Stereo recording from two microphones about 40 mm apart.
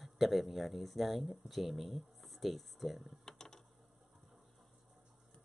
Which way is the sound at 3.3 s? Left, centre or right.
Centre.